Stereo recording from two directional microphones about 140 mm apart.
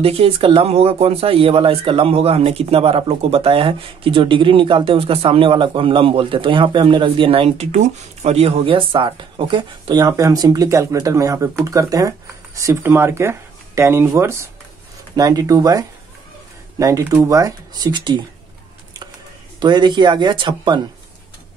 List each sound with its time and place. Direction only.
0.0 s speech: 45° right (ahead or behind)
19.6 s speech: 35° right (ahead or behind)